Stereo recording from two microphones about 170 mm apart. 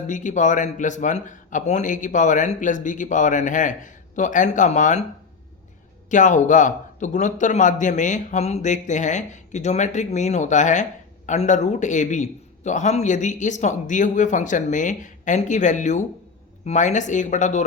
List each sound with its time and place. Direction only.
0.1 s a man's voice: 45° left (ahead or behind)
6.1 s a man's voice: 45° left (ahead or behind)